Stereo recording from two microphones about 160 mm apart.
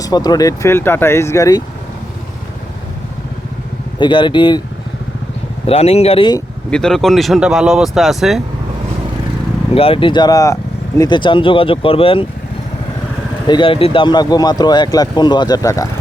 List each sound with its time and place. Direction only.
0.0 s speech: 25° left (ahead or behind)
3.9 s speech: 30° left (ahead or behind)
5.6 s speech: 40° left (ahead or behind)
6.7 s speech: 5° left (ahead or behind)
9.7 s speech: 35° left (ahead or behind)
13.5 s speech: 35° left (ahead or behind)